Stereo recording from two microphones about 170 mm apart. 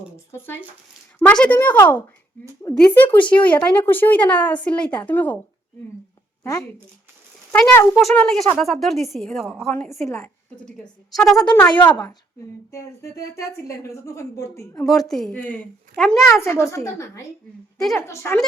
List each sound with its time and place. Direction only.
0.3 s a woman's voice: 15° left (ahead or behind)
3.2 s a woman's voice: 30° left (ahead or behind)
3.4 s a woman's voice: 10° left (ahead or behind)
6.4 s a woman's voice: 15° left (ahead or behind); by 9.6 s centre (ahead or behind)
10.7 s speech: centre (ahead or behind)
11.9 s a woman's voice: 25° left (ahead or behind)
14.8 s speech: centre (ahead or behind)
16.4 s a woman's voice: 15° left (ahead or behind)
17.7 s a woman's voice: centre (ahead or behind)
18.0 s a woman's voice: 15° left (ahead or behind)